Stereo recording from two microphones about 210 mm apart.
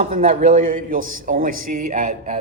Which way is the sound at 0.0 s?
35° right (ahead or behind).